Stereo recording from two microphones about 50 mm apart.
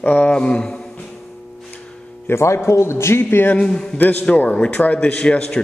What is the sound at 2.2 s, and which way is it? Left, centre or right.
A man's voice, left.